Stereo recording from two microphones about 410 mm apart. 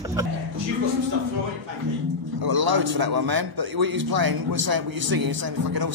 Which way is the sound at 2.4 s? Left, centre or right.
Right.